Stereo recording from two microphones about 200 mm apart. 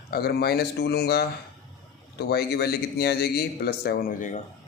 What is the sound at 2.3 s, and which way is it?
Speech, 50° left (ahead or behind).